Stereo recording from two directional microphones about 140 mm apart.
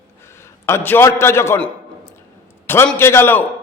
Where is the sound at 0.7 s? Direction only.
15° left (ahead or behind).